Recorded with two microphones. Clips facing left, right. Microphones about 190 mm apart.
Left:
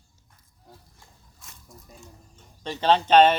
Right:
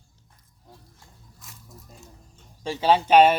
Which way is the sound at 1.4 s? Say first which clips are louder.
Right 1 dB; centre (ahead or behind).